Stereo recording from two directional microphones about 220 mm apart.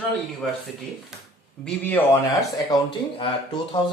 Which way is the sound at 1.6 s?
10° left (ahead or behind).